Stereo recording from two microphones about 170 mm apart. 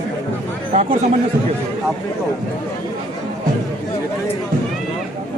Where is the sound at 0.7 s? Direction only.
40° right (ahead or behind).